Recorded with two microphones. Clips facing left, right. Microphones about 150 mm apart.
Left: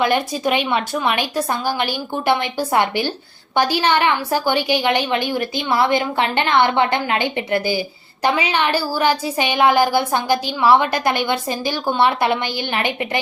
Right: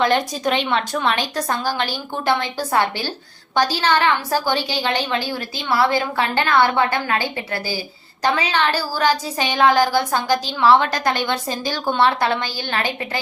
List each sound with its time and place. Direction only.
0.0 s a woman's voice: 10° left (ahead or behind)